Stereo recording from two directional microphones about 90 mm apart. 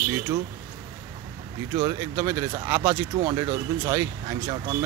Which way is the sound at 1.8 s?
40° right (ahead or behind).